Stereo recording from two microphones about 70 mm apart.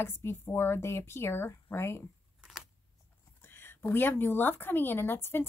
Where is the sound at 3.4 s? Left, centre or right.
Left.